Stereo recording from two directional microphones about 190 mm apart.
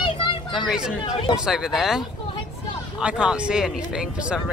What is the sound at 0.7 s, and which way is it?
Speech, 5° right (ahead or behind).